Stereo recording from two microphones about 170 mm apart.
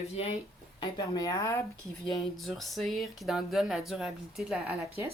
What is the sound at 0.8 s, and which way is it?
Speech, 25° left (ahead or behind).